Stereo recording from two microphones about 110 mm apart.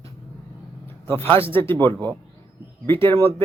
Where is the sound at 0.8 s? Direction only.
20° left (ahead or behind).